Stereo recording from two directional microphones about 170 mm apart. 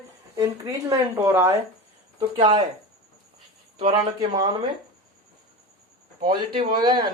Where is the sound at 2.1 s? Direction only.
30° right (ahead or behind).